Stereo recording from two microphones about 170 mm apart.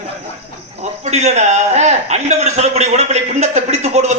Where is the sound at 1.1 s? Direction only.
40° right (ahead or behind).